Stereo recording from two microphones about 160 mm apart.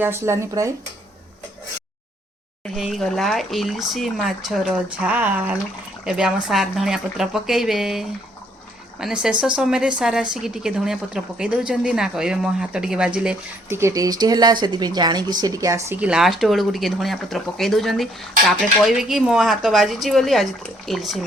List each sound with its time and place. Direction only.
0.0 s speech: 15° right (ahead or behind)
2.7 s speech: centre (ahead or behind)
13.7 s speech: 20° right (ahead or behind)
16.0 s speech: 5° right (ahead or behind)